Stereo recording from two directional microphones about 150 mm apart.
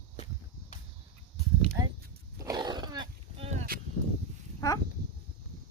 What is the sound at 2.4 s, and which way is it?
Wild animals, 25° right (ahead or behind).